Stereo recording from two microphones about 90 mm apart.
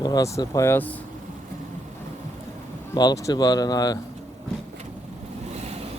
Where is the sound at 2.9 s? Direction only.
50° left (ahead or behind).